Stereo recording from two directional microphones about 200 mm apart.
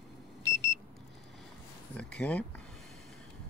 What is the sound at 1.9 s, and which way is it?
Speech, 5° left (ahead or behind).